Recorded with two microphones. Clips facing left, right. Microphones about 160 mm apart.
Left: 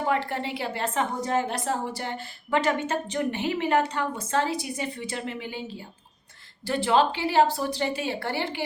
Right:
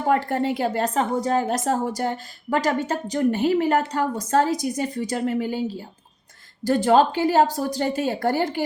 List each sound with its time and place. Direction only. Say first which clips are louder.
0.0 s a woman's voice: right 5 dB; 45° right (ahead or behind)
6.7 s speech: right 5 dB; 45° right (ahead or behind)